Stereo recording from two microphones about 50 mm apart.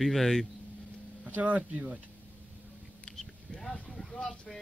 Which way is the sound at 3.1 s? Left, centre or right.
Centre.